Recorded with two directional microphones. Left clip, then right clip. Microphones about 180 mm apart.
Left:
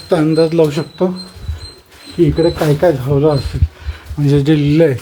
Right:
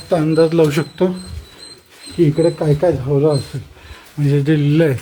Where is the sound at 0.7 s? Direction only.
15° right (ahead or behind).